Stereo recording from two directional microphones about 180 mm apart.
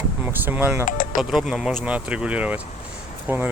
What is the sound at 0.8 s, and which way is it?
Speech, 50° left (ahead or behind).